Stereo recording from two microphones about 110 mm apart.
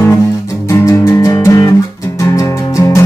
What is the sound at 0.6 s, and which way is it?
Music, 30° left (ahead or behind).